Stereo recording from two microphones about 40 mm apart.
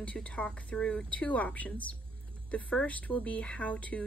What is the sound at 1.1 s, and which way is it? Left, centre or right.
A woman's voice, left.